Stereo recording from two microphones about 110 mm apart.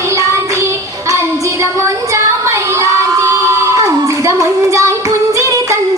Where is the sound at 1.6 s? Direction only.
25° right (ahead or behind).